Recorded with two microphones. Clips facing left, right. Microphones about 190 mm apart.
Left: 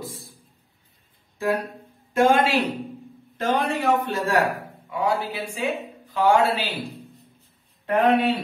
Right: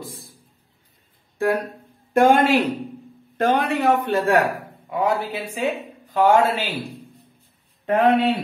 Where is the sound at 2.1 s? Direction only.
55° right (ahead or behind).